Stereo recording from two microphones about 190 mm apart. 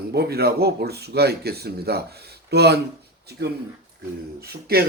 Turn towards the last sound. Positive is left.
turn(degrees=-55)  # may be behind; listen again after turning